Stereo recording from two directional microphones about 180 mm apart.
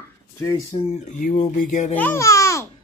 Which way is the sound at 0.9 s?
40° left (ahead or behind).